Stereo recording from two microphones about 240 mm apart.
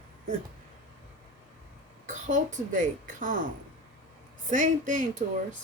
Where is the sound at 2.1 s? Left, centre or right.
Right.